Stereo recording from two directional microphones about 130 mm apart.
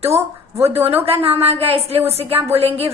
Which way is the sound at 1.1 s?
50° right (ahead or behind).